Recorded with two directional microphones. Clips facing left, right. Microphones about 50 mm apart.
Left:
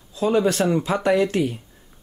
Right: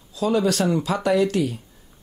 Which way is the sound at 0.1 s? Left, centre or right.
Left.